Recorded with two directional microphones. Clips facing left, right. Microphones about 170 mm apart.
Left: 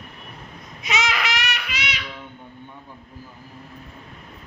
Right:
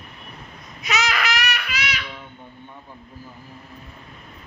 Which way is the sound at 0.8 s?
25° left (ahead or behind).